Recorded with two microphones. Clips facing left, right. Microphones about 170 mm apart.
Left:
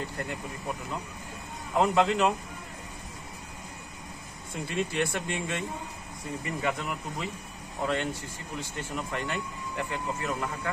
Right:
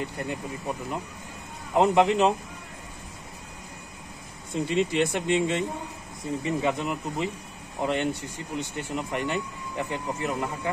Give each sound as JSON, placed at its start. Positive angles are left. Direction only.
{"t": 0.0, "sound": "speech", "side_deg": -20}
{"t": 1.7, "sound": "speech", "side_deg": -20}
{"t": 4.6, "sound": "speech", "side_deg": -20}